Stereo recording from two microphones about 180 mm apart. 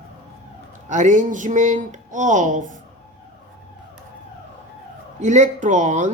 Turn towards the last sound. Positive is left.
turn(degrees=-40)  # may be behind; listen again after turning